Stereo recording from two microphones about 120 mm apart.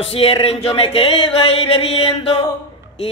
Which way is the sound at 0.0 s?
50° left (ahead or behind).